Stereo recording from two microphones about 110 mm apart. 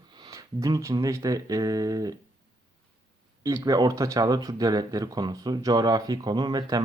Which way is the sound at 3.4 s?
30° right (ahead or behind).